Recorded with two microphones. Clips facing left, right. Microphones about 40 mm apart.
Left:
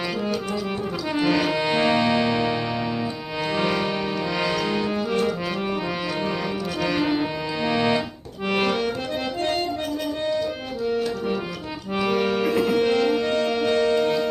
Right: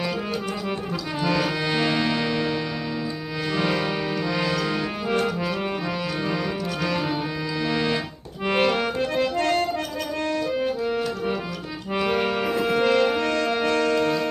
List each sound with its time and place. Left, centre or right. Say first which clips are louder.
1.2 s music: left 2 dB; centre
7.6 s organ: left 2 dB; centre
8.8 s accordion: right 2 dB; right
11.9 s music: left 1 dB; centre
12.8 s music: even; right
13.2 s music: left 1 dB; right
13.7 s music: left 2 dB; right